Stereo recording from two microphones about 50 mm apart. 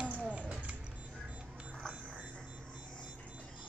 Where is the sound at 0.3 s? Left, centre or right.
Right.